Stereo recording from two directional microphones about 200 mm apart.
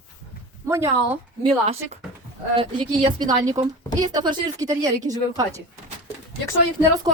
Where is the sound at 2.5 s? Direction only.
25° right (ahead or behind).